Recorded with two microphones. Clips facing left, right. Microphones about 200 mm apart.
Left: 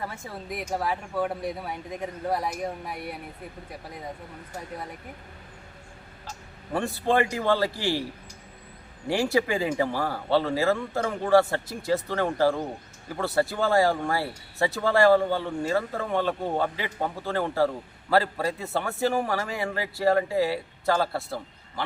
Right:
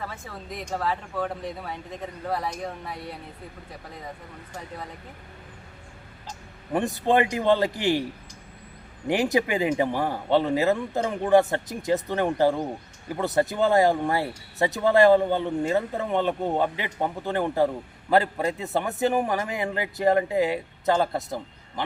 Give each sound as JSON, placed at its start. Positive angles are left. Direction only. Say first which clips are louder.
{"t": 0.0, "sound": "speech", "louder": "left 1 dB", "side_deg": 10}
{"t": 6.7, "sound": "speech", "louder": "right 2 dB", "side_deg": -20}
{"t": 9.0, "sound": "speech", "louder": "right 1 dB", "side_deg": -20}